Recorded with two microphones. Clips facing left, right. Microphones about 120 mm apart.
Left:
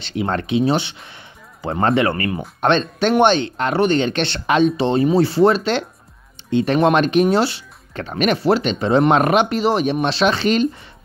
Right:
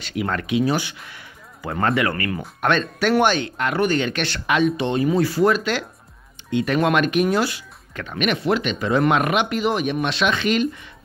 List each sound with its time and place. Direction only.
0.0 s speech: 30° left (ahead or behind)